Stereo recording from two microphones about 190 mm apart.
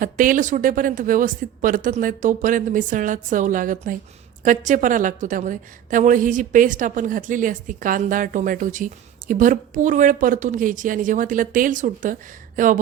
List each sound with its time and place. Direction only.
0.0 s a woman's voice: 45° right (ahead or behind)